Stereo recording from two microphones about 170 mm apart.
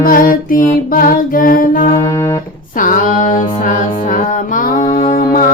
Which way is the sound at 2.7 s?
50° left (ahead or behind).